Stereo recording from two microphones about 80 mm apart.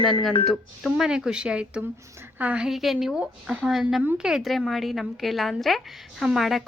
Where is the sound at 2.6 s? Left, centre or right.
Centre.